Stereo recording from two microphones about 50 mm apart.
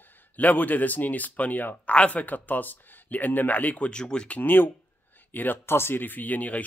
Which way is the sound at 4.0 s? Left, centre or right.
Centre.